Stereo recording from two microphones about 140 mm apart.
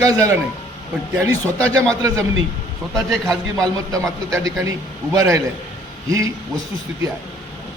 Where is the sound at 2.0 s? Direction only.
25° right (ahead or behind).